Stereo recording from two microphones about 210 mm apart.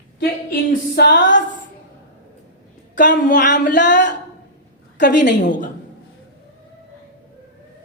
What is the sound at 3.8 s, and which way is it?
Speech, 55° left (ahead or behind).